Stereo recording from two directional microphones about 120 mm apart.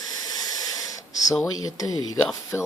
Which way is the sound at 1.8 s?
30° left (ahead or behind).